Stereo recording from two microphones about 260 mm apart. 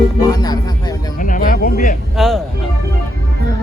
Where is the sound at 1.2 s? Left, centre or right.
Left.